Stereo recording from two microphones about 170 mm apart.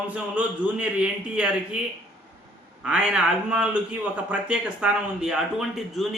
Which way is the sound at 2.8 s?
5° right (ahead or behind).